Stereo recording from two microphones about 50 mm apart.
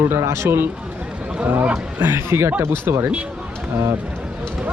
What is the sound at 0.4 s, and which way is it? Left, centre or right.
Speech, right.